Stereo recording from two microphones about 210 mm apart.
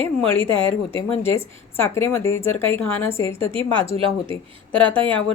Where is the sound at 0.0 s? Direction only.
25° right (ahead or behind).